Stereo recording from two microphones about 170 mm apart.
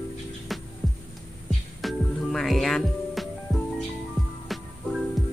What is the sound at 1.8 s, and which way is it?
Music, centre (ahead or behind).